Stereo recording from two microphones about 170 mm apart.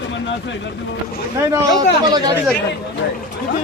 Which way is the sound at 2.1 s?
25° right (ahead or behind).